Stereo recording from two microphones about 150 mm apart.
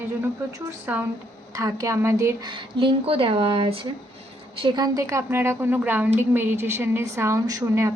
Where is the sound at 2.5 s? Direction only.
35° right (ahead or behind).